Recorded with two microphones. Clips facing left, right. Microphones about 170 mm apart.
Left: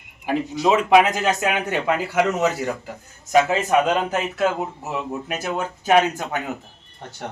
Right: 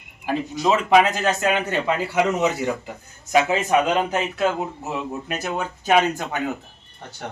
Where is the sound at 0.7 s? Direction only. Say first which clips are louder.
Left 1 dB; 15° left (ahead or behind).